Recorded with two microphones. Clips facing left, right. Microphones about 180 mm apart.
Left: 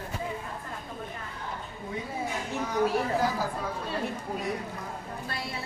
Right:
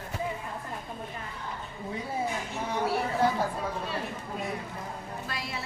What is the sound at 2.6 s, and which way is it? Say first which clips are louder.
Speech: left 2 dB; 30° right (ahead or behind).